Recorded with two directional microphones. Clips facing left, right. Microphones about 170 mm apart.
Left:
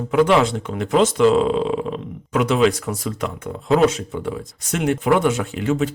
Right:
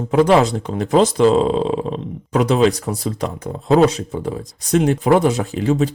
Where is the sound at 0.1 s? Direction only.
35° right (ahead or behind).